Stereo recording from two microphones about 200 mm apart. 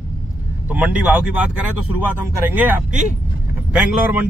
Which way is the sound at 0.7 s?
5° right (ahead or behind).